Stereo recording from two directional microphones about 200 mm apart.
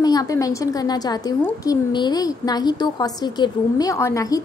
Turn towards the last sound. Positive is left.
turn(degrees=15)  # may be behind; listen again after turning